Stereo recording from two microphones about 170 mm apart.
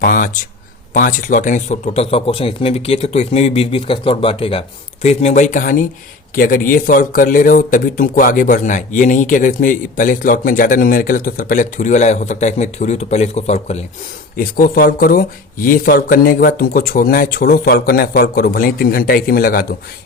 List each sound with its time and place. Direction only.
0.0 s a man's voice: 55° left (ahead or behind)
14.3 s speech: 60° left (ahead or behind)